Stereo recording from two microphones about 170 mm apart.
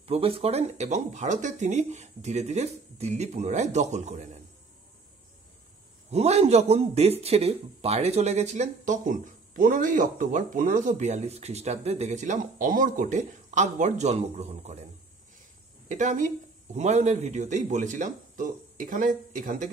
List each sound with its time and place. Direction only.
0.0 s speech: 35° right (ahead or behind)
6.0 s speech: 40° right (ahead or behind)
15.9 s speech: 50° right (ahead or behind)